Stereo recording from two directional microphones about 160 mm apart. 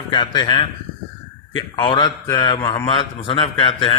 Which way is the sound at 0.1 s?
30° left (ahead or behind).